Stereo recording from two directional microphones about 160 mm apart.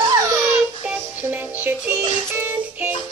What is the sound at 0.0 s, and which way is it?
Baby cry, 20° right (ahead or behind).